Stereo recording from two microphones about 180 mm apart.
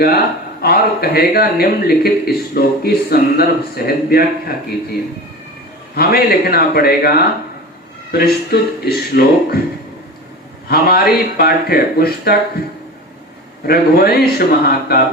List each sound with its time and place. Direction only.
0.6 s a man's voice: 60° left (ahead or behind)
6.0 s a man's voice: 60° left (ahead or behind)
10.7 s a man's voice: 60° left (ahead or behind)
13.7 s a man's voice: 60° left (ahead or behind)